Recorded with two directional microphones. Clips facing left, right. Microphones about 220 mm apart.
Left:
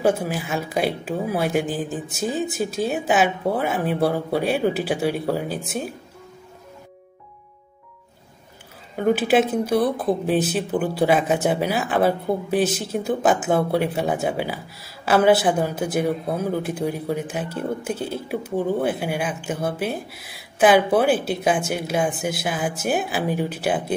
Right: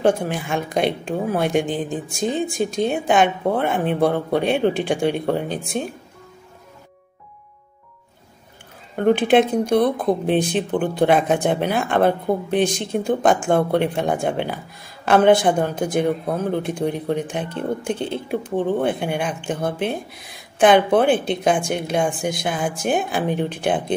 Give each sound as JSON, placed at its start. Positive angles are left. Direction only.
{"t": 0.0, "sound": "speech", "side_deg": 5}
{"t": 8.9, "sound": "speech", "side_deg": 5}